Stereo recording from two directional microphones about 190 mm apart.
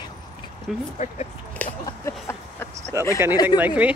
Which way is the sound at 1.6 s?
15° left (ahead or behind).